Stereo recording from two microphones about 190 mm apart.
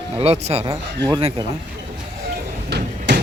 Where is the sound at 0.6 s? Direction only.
20° right (ahead or behind).